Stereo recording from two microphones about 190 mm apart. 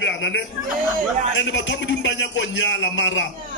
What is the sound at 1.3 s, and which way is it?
A man's voice, 75° left (ahead or behind).